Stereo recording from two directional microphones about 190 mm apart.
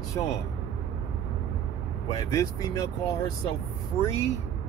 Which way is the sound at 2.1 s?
20° left (ahead or behind).